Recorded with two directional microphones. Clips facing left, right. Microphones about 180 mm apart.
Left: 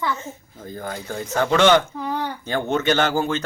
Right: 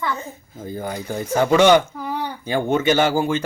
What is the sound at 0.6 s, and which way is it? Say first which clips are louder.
Speech: right 3 dB; 10° right (ahead or behind).